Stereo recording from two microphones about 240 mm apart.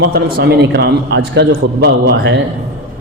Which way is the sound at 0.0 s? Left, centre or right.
Right.